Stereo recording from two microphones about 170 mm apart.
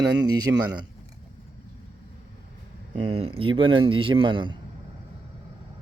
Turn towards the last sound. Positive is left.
turn(degrees=-30)  # may be behind; listen again after turning